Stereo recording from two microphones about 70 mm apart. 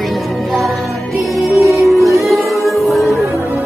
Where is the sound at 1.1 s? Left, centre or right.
Centre.